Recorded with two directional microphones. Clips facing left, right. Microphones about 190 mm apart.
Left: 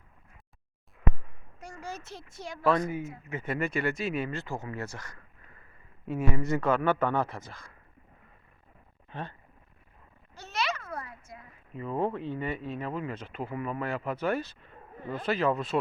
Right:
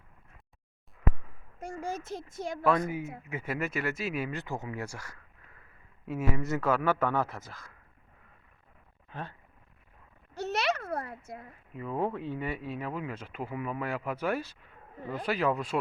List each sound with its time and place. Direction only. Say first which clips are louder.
1.5 s a child's voice: right 5 dB; 50° right (ahead or behind)
3.2 s a man's voice: left 3 dB; 10° right (ahead or behind)
9.0 s speech: left 2 dB; 5° right (ahead or behind)
10.3 s a sound: right 3 dB; 65° right (ahead or behind)
11.7 s speech: left 2 dB; 5° right (ahead or behind)